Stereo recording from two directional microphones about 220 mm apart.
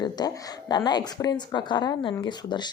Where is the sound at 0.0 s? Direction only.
20° left (ahead or behind).